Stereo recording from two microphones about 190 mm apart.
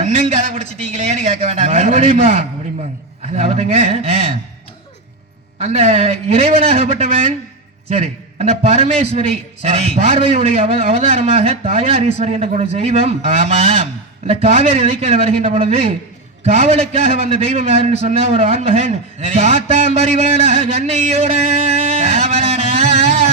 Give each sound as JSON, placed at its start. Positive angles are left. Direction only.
{"t": 0.0, "sound": "a sound", "side_deg": -35}
{"t": 0.9, "sound": "a man's voice", "side_deg": -35}
{"t": 5.5, "sound": "a man's voice", "side_deg": -35}